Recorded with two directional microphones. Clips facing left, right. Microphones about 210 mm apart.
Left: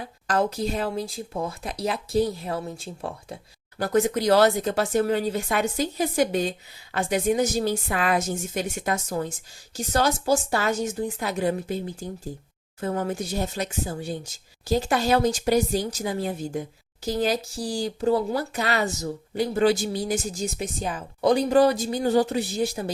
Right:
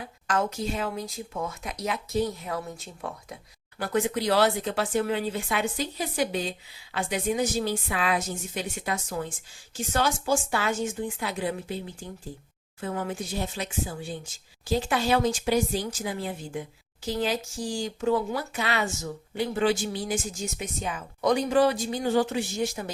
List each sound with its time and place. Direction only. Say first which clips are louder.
0.3 s speech: left 3 dB; 35° left (ahead or behind)
3.8 s speech: left 4 dB; 40° left (ahead or behind)